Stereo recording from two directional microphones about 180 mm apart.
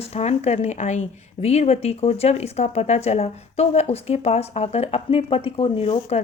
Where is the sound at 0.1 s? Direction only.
35° left (ahead or behind).